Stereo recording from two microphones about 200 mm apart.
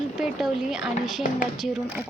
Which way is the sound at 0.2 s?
Centre (ahead or behind).